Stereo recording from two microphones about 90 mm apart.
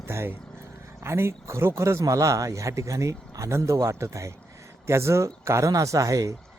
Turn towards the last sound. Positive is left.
turn(degrees=-40)  # may be behind; listen again after turning